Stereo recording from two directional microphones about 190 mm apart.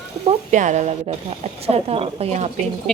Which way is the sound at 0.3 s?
40° right (ahead or behind).